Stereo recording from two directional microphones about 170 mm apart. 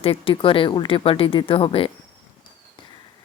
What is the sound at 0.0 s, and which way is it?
Speech, 35° left (ahead or behind).